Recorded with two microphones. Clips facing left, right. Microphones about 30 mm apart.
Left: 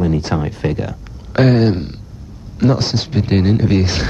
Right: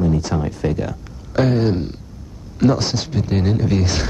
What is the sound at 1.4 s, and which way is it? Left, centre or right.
Speech, left.